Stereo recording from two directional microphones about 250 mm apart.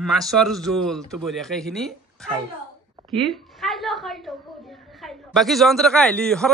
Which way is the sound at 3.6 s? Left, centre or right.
Centre.